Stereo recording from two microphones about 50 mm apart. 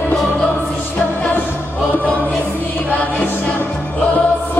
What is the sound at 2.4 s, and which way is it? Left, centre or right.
Music, left.